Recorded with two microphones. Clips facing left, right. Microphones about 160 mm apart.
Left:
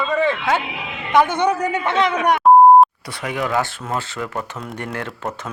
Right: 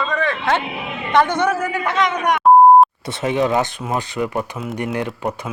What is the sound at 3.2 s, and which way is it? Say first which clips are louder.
Speech: right 4 dB; 25° right (ahead or behind).